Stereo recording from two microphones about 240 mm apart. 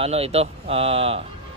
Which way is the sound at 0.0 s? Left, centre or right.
Right.